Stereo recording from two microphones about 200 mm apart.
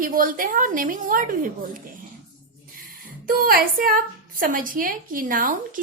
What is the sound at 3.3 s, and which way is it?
A woman's voice, 45° right (ahead or behind).